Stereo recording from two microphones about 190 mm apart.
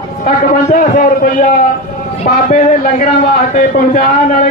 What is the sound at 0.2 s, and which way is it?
A man's voice, 40° left (ahead or behind).